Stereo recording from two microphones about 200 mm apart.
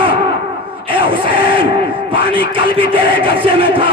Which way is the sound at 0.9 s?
25° right (ahead or behind).